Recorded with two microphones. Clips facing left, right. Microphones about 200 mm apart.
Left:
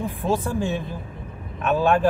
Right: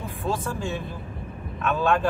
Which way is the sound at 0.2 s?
15° left (ahead or behind).